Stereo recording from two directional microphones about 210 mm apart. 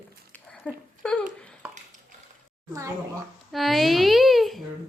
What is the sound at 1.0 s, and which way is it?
Speech, 5° left (ahead or behind).